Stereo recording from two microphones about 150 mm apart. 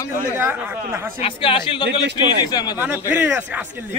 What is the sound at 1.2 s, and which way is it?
A man's voice, 35° left (ahead or behind).